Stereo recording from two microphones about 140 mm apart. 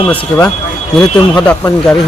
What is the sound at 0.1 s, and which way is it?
Speech, 10° left (ahead or behind).